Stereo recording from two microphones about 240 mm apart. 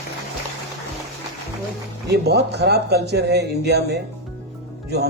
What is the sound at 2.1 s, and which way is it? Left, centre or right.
A man's voice, right.